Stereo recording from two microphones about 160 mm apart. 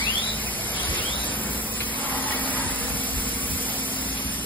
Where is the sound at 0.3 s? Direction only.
10° left (ahead or behind).